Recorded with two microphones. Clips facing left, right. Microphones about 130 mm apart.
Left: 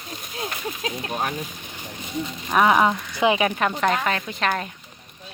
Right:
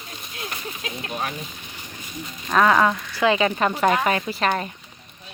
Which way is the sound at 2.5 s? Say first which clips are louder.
Even; 15° left (ahead or behind).